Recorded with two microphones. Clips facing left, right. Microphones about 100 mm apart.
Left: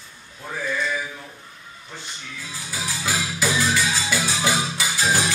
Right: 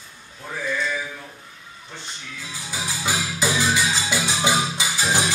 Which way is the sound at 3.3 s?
15° right (ahead or behind).